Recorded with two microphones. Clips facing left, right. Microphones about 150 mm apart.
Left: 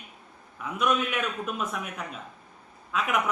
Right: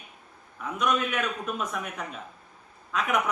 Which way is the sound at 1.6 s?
Centre (ahead or behind).